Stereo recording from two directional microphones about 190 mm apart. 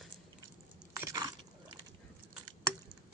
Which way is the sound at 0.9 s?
15° right (ahead or behind).